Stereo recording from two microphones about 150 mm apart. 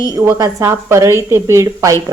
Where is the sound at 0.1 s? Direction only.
20° right (ahead or behind).